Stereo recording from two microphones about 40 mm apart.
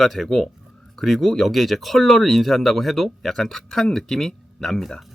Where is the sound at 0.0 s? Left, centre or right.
Centre.